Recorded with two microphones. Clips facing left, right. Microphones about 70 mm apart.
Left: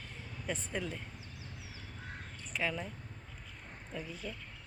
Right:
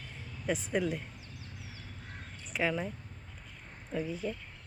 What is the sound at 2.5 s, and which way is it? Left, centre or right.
Speech, centre.